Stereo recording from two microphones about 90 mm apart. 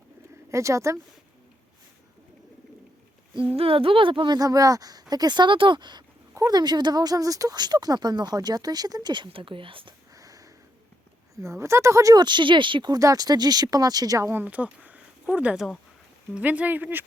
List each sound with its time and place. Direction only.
0.5 s speech: 35° right (ahead or behind)
3.5 s speech: 90° right; by 4.4 s 70° right (ahead or behind)
4.4 s speech: 40° right (ahead or behind); by 9.9 s 75° right (ahead or behind)
10.1 s sniff: 40° right (ahead or behind)
11.3 s speech: 30° right (ahead or behind)
12.1 s speech: 60° right (ahead or behind)
12.9 s speech: 40° right (ahead or behind)
14.3 s speech: 15° right (ahead or behind)